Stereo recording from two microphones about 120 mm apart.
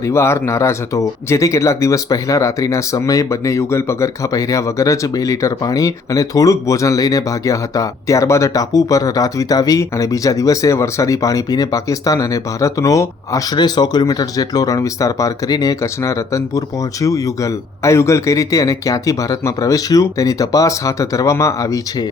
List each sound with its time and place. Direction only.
0.0 s speech: 25° left (ahead or behind)